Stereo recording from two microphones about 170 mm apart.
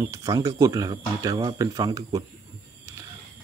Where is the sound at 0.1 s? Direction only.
20° right (ahead or behind).